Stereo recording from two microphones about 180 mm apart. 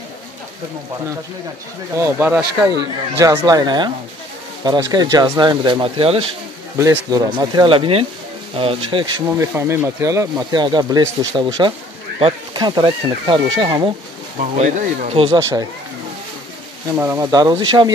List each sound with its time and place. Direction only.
2.0 s speech: 10° right (ahead or behind); by 6.2 s 30° right (ahead or behind)
6.8 s speech: 20° right (ahead or behind)
9.4 s speech: 15° right (ahead or behind)
14.6 s speech: 45° right (ahead or behind)
16.9 s speech: 15° right (ahead or behind)